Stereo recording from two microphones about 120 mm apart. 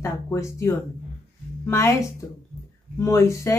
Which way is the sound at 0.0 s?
25° left (ahead or behind).